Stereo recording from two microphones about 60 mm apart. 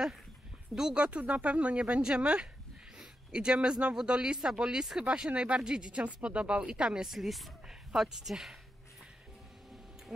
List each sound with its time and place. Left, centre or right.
0.7 s speech: centre
7.1 s speech: centre